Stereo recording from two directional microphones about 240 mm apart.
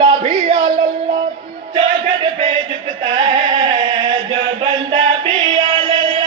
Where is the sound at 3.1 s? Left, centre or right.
Centre.